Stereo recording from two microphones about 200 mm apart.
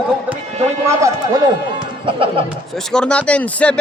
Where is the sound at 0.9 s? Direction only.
15° right (ahead or behind).